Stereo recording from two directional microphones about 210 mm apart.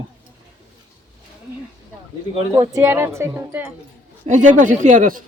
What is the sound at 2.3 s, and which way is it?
Speech, 25° right (ahead or behind).